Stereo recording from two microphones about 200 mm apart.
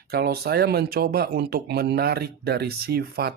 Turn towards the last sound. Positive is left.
turn(degrees=-50)  # may be behind; listen again after turning